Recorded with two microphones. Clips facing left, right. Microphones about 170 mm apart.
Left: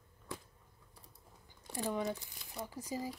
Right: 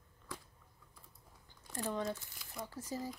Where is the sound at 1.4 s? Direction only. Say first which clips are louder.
Left 2 dB; 15° left (ahead or behind).